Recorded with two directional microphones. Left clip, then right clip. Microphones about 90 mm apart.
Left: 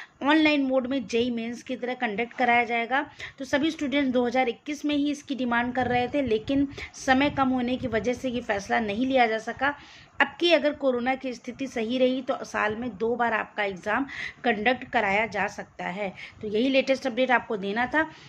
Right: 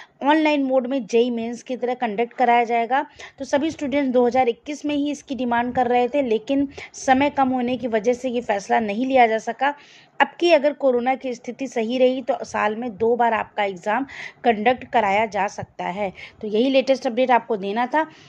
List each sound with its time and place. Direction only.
0.3 s a woman's voice: 35° right (ahead or behind)